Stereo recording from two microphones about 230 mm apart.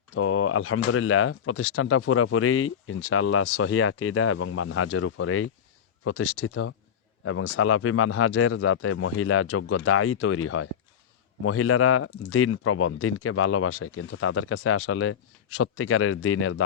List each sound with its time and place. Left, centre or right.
0.1 s speech: left